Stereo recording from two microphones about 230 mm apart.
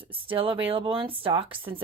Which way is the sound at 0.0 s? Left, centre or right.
Right.